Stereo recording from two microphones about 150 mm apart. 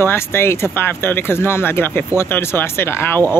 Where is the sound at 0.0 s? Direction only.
15° left (ahead or behind).